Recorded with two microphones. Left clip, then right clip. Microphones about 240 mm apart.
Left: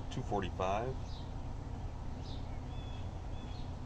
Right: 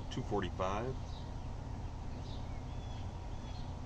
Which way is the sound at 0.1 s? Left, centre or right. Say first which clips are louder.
Even; centre.